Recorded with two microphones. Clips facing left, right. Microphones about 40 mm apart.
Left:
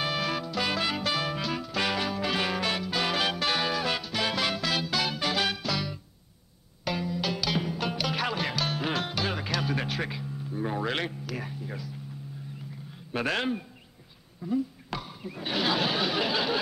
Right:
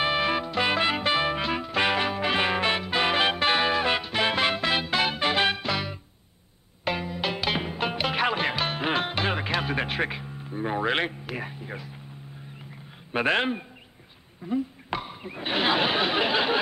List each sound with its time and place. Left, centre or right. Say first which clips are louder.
0.0 s music: right 5 dB; right
13.1 s a man's voice: right 4 dB; right
14.4 s a sound: right 1 dB; right